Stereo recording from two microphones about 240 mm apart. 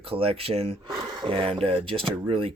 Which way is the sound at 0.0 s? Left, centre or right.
Right.